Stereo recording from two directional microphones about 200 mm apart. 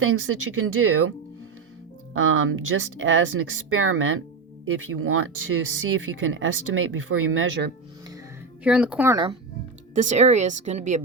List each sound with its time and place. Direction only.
0.0 s speech: 90° right
2.1 s speech: 90° right
8.6 s speech: 5° right (ahead or behind)
9.9 s a woman's voice: 40° right (ahead or behind)